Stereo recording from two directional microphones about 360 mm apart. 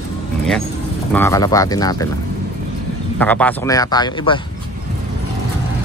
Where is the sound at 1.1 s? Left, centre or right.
Centre.